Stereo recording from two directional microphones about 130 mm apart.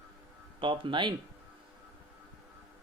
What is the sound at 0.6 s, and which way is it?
Speech, 40° right (ahead or behind).